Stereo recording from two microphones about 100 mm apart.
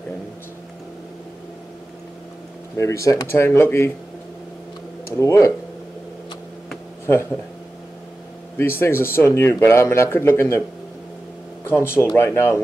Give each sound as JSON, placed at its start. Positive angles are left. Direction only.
{"t": 2.8, "sound": "speech", "side_deg": 35}
{"t": 5.1, "sound": "speech", "side_deg": 30}
{"t": 8.5, "sound": "speech", "side_deg": 25}
{"t": 11.7, "sound": "speech", "side_deg": 25}